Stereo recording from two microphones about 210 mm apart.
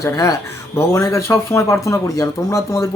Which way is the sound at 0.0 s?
15° left (ahead or behind).